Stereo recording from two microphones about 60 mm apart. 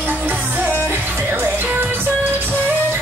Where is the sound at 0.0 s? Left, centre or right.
Right.